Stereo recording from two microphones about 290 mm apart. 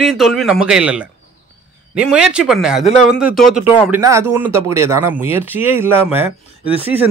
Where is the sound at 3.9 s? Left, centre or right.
Centre.